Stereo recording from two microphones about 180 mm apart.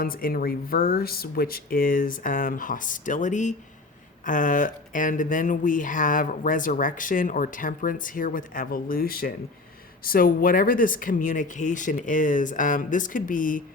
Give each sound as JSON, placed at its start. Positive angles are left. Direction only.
{"t": 0.0, "sound": "speech", "side_deg": 55}